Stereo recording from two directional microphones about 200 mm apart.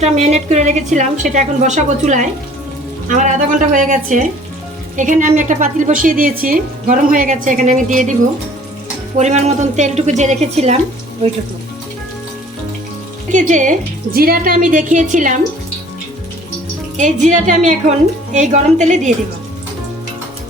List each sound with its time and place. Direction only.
0.0 s a woman's voice: 35° right (ahead or behind)
9.1 s a woman's voice: 35° right (ahead or behind)
13.3 s a woman's voice: 40° right (ahead or behind)
17.0 s a woman's voice: 35° right (ahead or behind)